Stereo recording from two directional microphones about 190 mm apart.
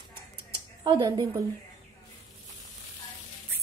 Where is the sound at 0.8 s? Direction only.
25° right (ahead or behind).